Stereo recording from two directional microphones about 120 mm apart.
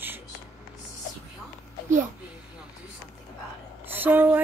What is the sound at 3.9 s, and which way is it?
Speech, 15° right (ahead or behind).